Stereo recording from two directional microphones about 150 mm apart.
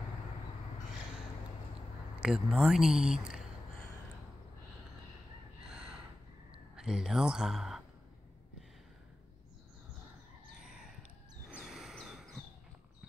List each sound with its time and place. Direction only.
2.2 s speech: 5° right (ahead or behind)
5.7 s gasp: 5° right (ahead or behind)
6.7 s speech: 5° right (ahead or behind)
11.4 s a sound: centre (ahead or behind)